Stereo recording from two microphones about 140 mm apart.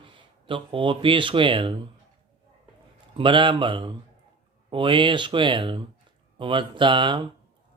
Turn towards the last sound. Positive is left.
turn(degrees=-35)  # may be behind; listen again after turning